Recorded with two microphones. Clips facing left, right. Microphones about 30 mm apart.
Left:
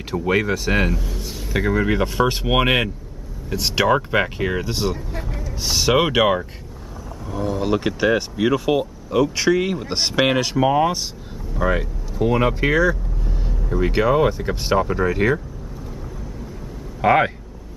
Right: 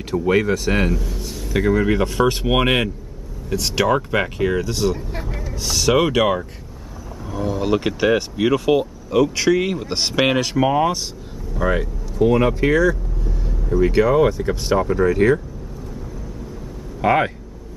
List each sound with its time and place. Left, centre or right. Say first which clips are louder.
0.1 s speech: right 2 dB; centre
5.2 s vehicle: right 1 dB; centre
5.5 s speech: even; centre
7.2 s speech: right 1 dB; centre
17.0 s speech: left 1 dB; centre